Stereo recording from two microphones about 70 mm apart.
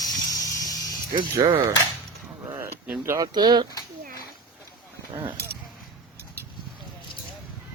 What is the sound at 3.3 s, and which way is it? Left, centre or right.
Speech, right.